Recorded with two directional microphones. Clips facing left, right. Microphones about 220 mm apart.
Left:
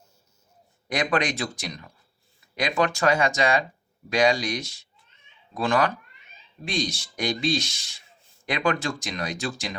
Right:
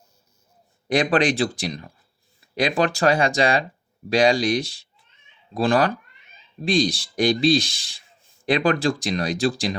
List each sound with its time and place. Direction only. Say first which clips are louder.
0.9 s speech: right 6 dB; 30° right (ahead or behind)